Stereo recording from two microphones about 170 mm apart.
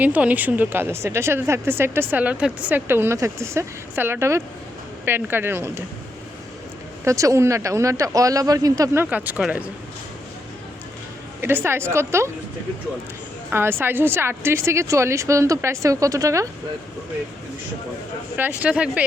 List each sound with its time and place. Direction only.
0.0 s speech: 10° right (ahead or behind)
7.0 s speech: 20° right (ahead or behind)
11.3 s speech: 15° right (ahead or behind)
13.5 s speech: 15° right (ahead or behind)
18.3 s speech: 10° right (ahead or behind)